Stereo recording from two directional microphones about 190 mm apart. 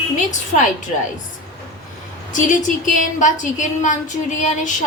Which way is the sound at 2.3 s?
45° left (ahead or behind).